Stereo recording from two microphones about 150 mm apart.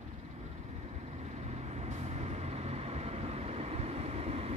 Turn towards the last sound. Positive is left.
turn(degrees=-40)  # may be behind; listen again after turning